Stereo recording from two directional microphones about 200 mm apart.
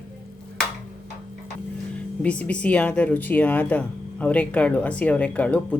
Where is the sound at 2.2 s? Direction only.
5° left (ahead or behind).